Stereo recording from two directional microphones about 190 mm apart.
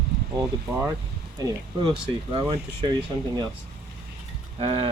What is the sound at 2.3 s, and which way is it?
Speech, 25° right (ahead or behind).